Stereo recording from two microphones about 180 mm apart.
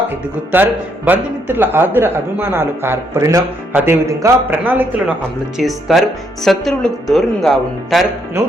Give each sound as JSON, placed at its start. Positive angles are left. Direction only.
{"t": 0.5, "sound": "a man's voice", "side_deg": -10}
{"t": 8.4, "sound": "music", "side_deg": -15}